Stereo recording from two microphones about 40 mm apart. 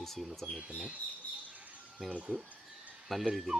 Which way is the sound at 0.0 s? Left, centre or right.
Centre.